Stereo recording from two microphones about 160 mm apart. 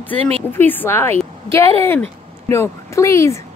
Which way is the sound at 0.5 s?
10° left (ahead or behind).